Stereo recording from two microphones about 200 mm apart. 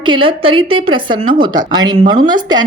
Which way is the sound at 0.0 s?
25° right (ahead or behind).